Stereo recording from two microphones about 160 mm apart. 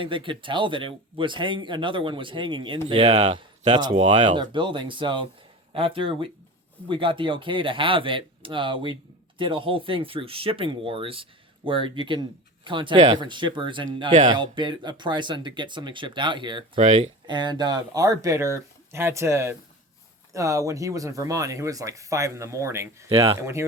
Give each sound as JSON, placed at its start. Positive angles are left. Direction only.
{"t": 0.0, "sound": "speech", "side_deg": -30}
{"t": 3.1, "sound": "speech", "side_deg": -45}
{"t": 4.3, "sound": "speech", "side_deg": -30}
{"t": 14.1, "sound": "speech", "side_deg": -55}
{"t": 14.3, "sound": "speech", "side_deg": -30}
{"t": 16.7, "sound": "speech", "side_deg": -50}
{"t": 17.2, "sound": "speech", "side_deg": -30}